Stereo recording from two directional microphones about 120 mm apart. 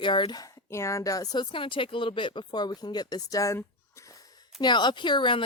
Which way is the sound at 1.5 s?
45° left (ahead or behind).